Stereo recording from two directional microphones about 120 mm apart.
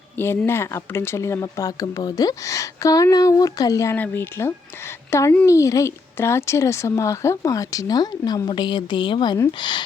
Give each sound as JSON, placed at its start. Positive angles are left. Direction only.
{"t": 0.2, "sound": "a woman's voice", "side_deg": 20}
{"t": 3.9, "sound": "a woman's voice", "side_deg": 15}